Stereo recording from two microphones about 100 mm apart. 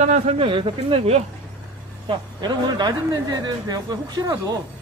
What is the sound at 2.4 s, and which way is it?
A man's voice, 45° right (ahead or behind).